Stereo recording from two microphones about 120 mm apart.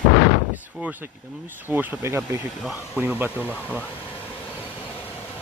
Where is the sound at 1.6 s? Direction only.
15° right (ahead or behind).